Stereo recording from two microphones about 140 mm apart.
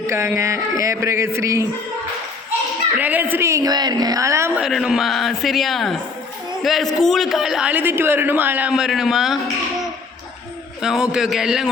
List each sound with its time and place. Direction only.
0.1 s speech: 20° right (ahead or behind)
3.0 s a woman's voice: 10° right (ahead or behind)
4.5 s a man's voice: 5° right (ahead or behind)
10.8 s a man's voice: 5° right (ahead or behind)